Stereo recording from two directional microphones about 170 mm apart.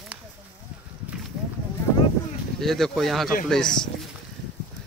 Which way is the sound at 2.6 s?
Centre (ahead or behind).